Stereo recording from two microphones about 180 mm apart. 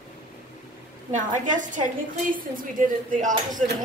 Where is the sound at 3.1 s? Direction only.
45° right (ahead or behind).